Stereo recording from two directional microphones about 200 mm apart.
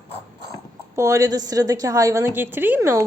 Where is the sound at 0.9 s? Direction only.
15° right (ahead or behind).